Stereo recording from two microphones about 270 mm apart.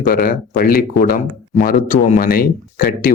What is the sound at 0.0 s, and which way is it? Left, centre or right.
Speech, left.